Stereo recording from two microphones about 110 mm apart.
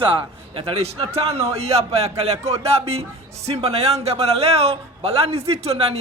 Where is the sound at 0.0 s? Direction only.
50° right (ahead or behind).